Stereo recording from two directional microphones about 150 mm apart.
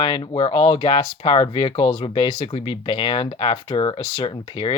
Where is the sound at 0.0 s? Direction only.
35° left (ahead or behind).